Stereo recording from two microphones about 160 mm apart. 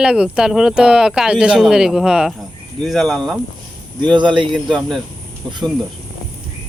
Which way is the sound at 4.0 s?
30° right (ahead or behind).